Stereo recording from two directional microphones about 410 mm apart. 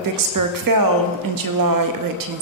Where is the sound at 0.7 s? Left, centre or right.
Right.